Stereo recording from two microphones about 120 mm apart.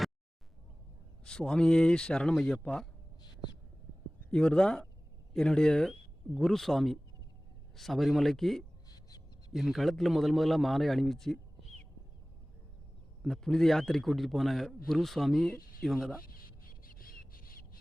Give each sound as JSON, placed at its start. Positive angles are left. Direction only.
{"t": 1.2, "sound": "speech", "side_deg": 5}
{"t": 4.3, "sound": "a man's voice", "side_deg": 5}
{"t": 8.9, "sound": "a sound", "side_deg": 30}
{"t": 9.5, "sound": "a man's voice", "side_deg": 0}
{"t": 13.2, "sound": "a man's voice", "side_deg": 5}